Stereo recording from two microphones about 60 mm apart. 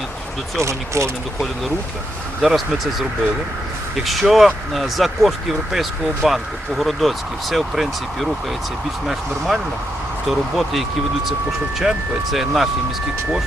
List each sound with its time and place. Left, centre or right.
0.6 s speech: right
2.4 s speech: centre
4.0 s speech: centre
10.2 s speech: centre